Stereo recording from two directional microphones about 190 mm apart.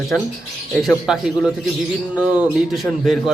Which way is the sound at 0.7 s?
Centre (ahead or behind).